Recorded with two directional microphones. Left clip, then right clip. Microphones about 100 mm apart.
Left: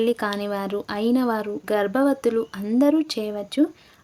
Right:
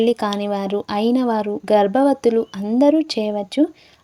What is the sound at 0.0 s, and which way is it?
Speech, 35° right (ahead or behind).